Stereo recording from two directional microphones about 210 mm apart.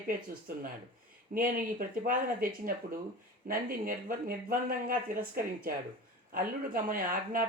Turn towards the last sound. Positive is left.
turn(degrees=-40)  # may be behind; listen again after turning